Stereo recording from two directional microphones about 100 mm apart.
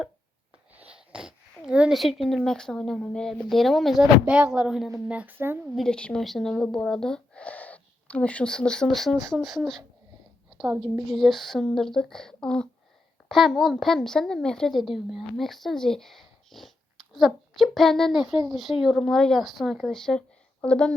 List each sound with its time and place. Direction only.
1.1 s a child's voice: 10° right (ahead or behind)
5.1 s speech: 20° right (ahead or behind)
5.7 s speech: 5° left (ahead or behind)
11.0 s a woman's voice: centre (ahead or behind)